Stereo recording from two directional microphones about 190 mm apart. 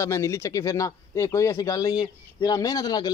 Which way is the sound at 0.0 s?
15° left (ahead or behind).